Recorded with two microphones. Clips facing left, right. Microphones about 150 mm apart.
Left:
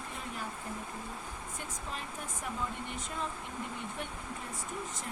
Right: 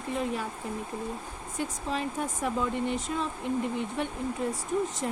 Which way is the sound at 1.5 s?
90° right.